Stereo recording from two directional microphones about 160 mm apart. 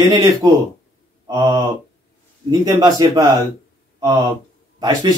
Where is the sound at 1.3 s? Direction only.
25° right (ahead or behind).